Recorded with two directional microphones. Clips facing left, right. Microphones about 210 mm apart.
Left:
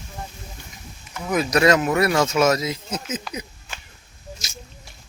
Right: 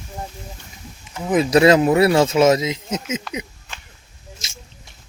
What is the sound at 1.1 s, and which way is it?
Speech, 25° right (ahead or behind).